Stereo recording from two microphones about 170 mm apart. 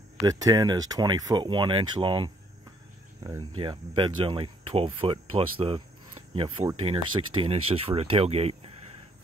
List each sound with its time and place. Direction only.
0.2 s speech: 20° right (ahead or behind); by 8.7 s 35° right (ahead or behind)